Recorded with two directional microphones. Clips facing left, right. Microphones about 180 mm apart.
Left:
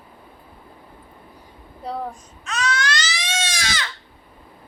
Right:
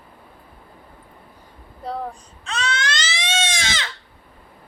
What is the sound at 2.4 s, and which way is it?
Baby cry, 30° right (ahead or behind).